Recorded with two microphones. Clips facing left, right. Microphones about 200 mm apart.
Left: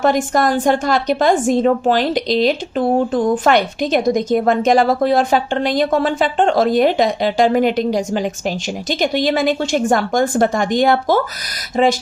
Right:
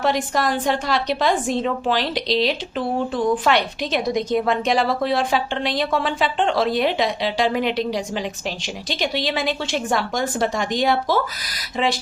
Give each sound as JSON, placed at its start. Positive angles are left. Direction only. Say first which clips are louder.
{"t": 0.0, "sound": "a woman's voice", "louder": "left 6 dB", "side_deg": 50}